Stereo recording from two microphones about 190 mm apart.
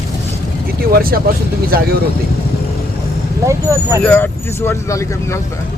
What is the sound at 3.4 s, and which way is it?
Speech, 15° right (ahead or behind).